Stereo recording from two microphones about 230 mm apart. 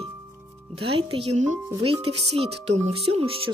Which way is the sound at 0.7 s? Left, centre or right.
Right.